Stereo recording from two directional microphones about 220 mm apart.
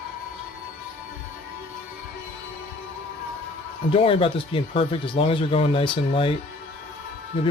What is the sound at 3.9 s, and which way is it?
Speech, 25° left (ahead or behind).